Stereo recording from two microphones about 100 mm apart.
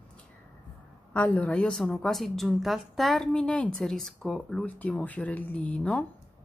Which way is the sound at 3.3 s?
10° left (ahead or behind).